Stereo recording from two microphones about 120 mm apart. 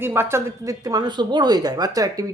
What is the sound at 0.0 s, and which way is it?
Speech, 20° right (ahead or behind).